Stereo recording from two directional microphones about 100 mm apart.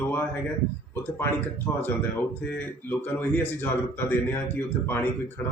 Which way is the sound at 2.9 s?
20° left (ahead or behind).